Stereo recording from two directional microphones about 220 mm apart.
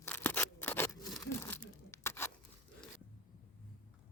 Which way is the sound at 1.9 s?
10° left (ahead or behind).